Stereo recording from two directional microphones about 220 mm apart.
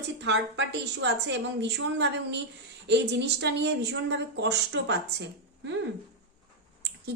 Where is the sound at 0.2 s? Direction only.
50° right (ahead or behind).